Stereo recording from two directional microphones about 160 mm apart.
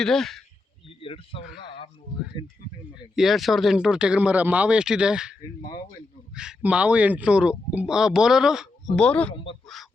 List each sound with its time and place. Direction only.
0.0 s speech: 5° left (ahead or behind)
0.9 s a sound: 35° left (ahead or behind)
2.3 s speech: 30° left (ahead or behind)
2.9 s speech: centre (ahead or behind)
9.0 s speech: 5° left (ahead or behind)
9.3 s speech: 35° left (ahead or behind)